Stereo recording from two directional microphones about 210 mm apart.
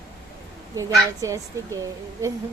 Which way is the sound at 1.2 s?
15° right (ahead or behind).